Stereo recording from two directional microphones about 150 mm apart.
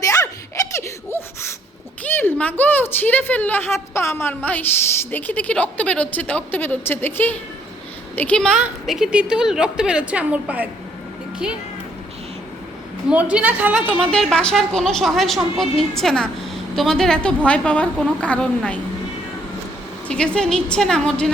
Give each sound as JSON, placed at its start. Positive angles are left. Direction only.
{"t": 0.0, "sound": "giggle", "side_deg": 20}
{"t": 2.1, "sound": "a woman's voice", "side_deg": 10}
{"t": 13.3, "sound": "a woman's voice", "side_deg": -10}
{"t": 13.8, "sound": "a woman's voice", "side_deg": 5}
{"t": 20.1, "sound": "a woman's voice", "side_deg": 5}